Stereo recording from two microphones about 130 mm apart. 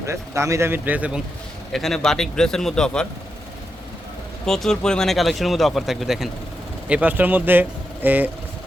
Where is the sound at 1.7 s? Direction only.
Centre (ahead or behind).